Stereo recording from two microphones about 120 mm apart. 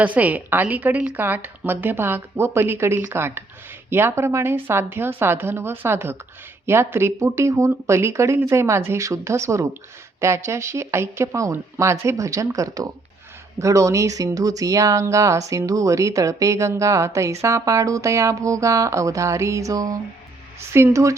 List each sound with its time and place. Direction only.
0.0 s a woman's voice: 15° right (ahead or behind)